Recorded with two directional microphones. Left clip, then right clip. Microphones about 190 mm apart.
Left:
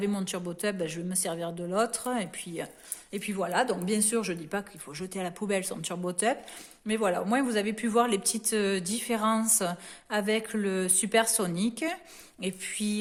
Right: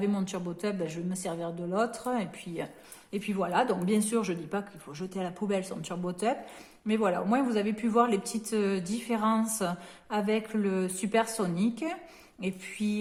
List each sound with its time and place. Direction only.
0.0 s speech: 35° left (ahead or behind)